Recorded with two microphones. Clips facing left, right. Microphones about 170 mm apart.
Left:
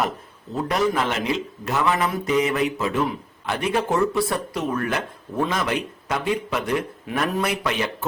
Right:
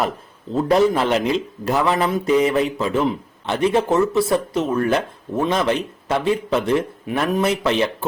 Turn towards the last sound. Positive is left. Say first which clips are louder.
# right 6 dB
turn(degrees=-25)  # may be behind; listen again after turning